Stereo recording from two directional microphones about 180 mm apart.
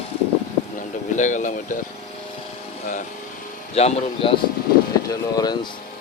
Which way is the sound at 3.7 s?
35° left (ahead or behind).